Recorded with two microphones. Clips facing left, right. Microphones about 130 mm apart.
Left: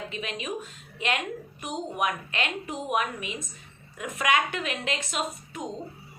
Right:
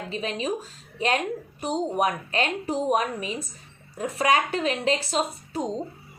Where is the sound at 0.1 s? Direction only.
35° right (ahead or behind).